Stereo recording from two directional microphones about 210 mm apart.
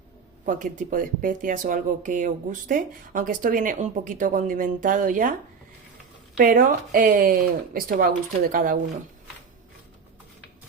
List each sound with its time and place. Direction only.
0.4 s speech: 40° right (ahead or behind)
6.4 s speech: 40° right (ahead or behind)